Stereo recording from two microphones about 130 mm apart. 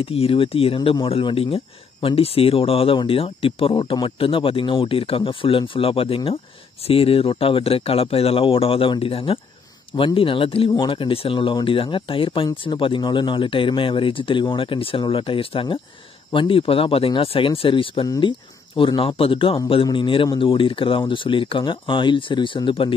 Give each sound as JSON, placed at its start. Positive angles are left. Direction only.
{"t": 0.0, "sound": "speech", "side_deg": 45}
{"t": 18.0, "sound": "speech", "side_deg": 30}
{"t": 18.8, "sound": "speech", "side_deg": 40}